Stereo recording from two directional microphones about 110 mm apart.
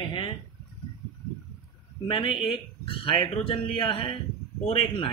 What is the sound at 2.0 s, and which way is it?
A man's voice, 50° left (ahead or behind).